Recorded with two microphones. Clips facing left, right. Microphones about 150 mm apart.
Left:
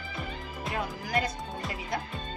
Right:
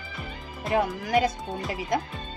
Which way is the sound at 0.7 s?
80° right.